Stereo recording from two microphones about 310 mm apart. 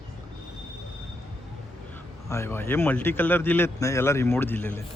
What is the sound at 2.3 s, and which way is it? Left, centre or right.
Speech, centre.